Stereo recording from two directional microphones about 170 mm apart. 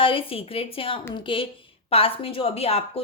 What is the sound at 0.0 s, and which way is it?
A woman's voice, 30° left (ahead or behind).